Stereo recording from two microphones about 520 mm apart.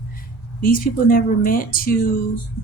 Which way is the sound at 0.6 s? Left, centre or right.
Centre.